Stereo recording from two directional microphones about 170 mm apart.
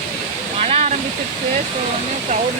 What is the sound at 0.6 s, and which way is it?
Waterfall, 40° right (ahead or behind).